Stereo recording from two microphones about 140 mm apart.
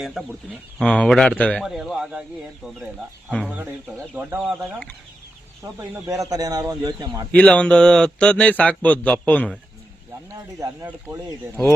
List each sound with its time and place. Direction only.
0.0 s speech: centre (ahead or behind)
5.6 s speech: 20° right (ahead or behind)
7.3 s a man's voice: 10° left (ahead or behind)
10.6 s speech: 20° right (ahead or behind)